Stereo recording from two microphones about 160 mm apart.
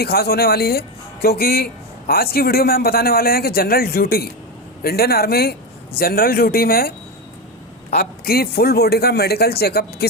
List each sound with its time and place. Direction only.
0.0 s speech: 75° left (ahead or behind)